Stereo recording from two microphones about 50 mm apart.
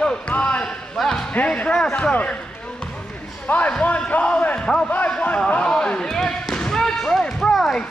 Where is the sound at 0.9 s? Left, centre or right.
Centre.